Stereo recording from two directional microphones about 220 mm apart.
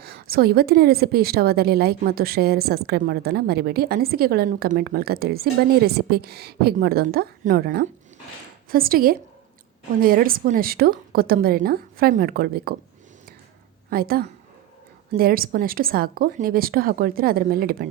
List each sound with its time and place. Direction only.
0.0 s a woman's voice: 45° right (ahead or behind)
13.9 s a woman's voice: 40° right (ahead or behind)